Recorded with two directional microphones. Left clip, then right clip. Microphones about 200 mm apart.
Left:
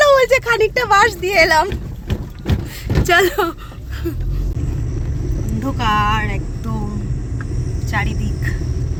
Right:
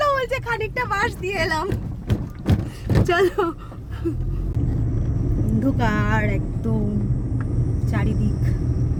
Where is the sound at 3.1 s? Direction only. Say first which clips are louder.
Left 6 dB; centre (ahead or behind).